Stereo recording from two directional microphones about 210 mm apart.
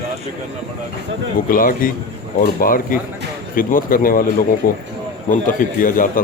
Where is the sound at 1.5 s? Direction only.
40° left (ahead or behind).